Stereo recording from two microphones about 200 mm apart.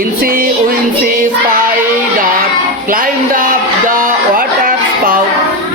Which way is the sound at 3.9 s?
45° right (ahead or behind).